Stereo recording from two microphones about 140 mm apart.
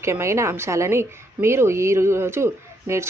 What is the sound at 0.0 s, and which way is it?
A woman's voice, 20° right (ahead or behind).